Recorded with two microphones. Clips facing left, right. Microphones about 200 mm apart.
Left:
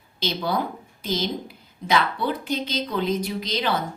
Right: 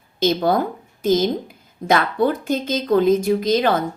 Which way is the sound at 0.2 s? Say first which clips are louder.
Right 8 dB; 50° right (ahead or behind).